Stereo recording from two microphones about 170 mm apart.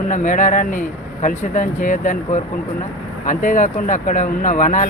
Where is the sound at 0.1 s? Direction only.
50° left (ahead or behind).